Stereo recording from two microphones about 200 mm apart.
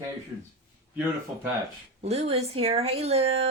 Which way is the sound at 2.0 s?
30° right (ahead or behind).